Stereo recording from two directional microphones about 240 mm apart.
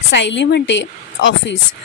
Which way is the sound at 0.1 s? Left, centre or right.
Left.